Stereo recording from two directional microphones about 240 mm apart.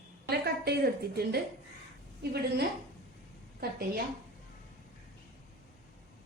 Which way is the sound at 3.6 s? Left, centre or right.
Right.